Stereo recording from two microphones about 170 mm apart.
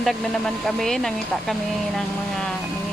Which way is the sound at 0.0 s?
Centre (ahead or behind).